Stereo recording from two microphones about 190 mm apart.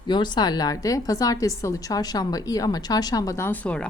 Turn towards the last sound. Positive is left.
turn(degrees=5)  # may be behind; listen again after turning